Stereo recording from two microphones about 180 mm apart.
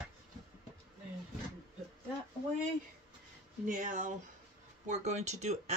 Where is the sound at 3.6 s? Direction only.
45° right (ahead or behind).